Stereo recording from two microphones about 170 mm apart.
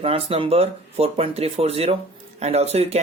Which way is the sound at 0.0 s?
35° right (ahead or behind).